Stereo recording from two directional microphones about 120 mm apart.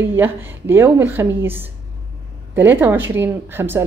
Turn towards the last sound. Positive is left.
turn(degrees=-20)  # may be behind; listen again after turning